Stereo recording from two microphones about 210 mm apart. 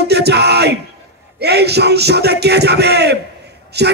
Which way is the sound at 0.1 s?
50° right (ahead or behind).